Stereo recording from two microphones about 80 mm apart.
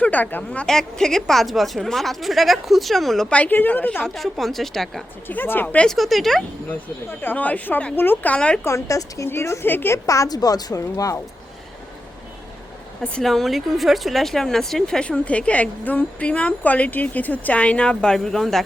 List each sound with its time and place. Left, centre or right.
0.0 s speech: centre
0.6 s a woman's voice: centre
3.2 s speech: centre
4.0 s a woman's voice: centre
5.3 s speech: left
5.9 s a woman's voice: centre
6.7 s speech: left
8.6 s a woman's voice: left
10.1 s a woman's voice: left
13.0 s speech: centre